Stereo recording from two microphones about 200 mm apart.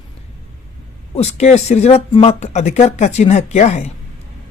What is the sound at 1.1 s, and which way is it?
Speech, 35° left (ahead or behind).